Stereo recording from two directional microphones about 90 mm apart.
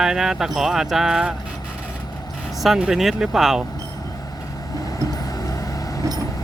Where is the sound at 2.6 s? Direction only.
Centre (ahead or behind).